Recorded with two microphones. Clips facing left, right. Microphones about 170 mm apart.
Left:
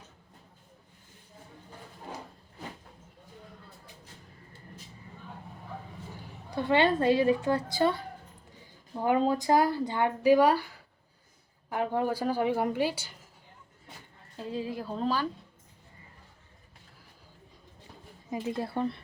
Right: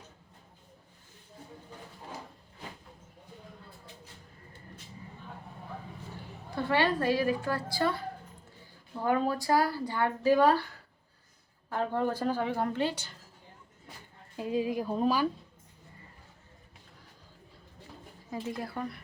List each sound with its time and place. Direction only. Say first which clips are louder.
6.7 s speech: left 4 dB; 20° left (ahead or behind)
9.0 s speech: left 3 dB; 20° left (ahead or behind)
11.7 s a woman's voice: left 1 dB; 15° left (ahead or behind)
14.3 s speech: right 4 dB; 15° right (ahead or behind)
18.3 s speech: left 3 dB; 20° left (ahead or behind)